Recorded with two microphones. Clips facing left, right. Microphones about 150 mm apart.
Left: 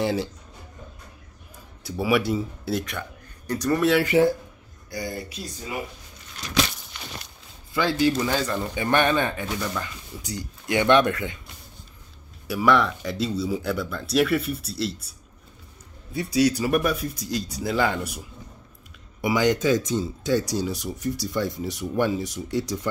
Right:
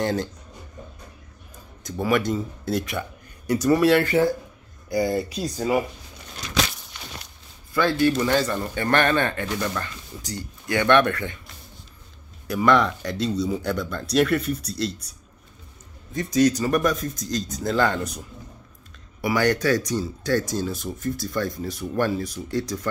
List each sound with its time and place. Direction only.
0.0 s speech: 5° left (ahead or behind)
1.8 s speech: 10° left (ahead or behind); by 3.9 s 10° right (ahead or behind)
4.0 s speech: 15° left (ahead or behind)
4.9 s speech: 25° right (ahead or behind)
7.7 s speech: 15° left (ahead or behind)
10.3 s speech: 20° left (ahead or behind)
12.4 s speech: 5° left (ahead or behind)
16.3 s speech: 10° left (ahead or behind)
19.2 s speech: 20° left (ahead or behind)